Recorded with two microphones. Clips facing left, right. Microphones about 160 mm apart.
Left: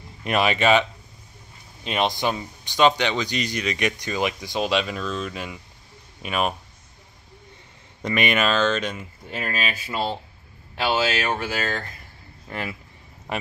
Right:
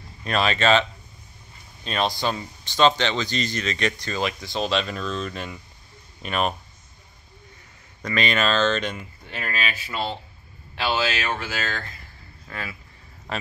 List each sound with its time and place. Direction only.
0.2 s speech: 15° left (ahead or behind)
1.9 s speech: 15° left (ahead or behind)
8.0 s speech: 15° left (ahead or behind)
10.9 s speech: 10° left (ahead or behind)
12.4 s speech: 20° left (ahead or behind)